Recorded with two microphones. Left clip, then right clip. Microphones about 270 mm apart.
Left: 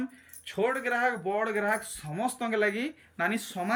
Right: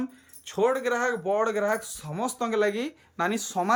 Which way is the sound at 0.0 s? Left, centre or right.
Centre.